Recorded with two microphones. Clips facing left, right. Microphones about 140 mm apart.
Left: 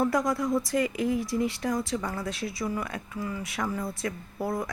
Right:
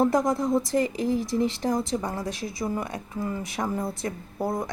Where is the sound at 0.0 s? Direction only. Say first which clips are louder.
Right 3 dB; 25° right (ahead or behind).